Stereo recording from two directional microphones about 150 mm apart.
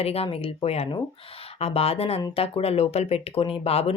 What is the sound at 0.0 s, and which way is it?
Speech, 40° left (ahead or behind).